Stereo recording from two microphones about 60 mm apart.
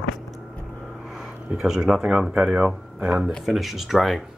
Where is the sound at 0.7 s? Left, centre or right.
Centre.